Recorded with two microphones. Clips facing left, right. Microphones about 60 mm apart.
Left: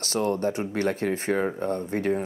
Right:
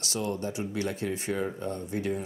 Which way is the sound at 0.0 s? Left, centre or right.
Left.